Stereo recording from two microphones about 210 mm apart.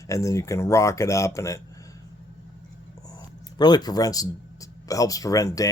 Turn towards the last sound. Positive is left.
turn(degrees=15)  # may be behind; listen again after turning